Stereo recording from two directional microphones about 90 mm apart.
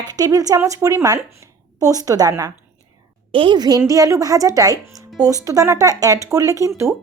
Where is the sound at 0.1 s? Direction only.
45° right (ahead or behind).